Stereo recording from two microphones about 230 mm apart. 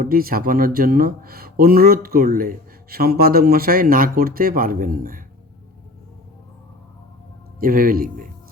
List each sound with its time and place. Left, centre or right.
0.0 s speech: right
7.6 s speech: right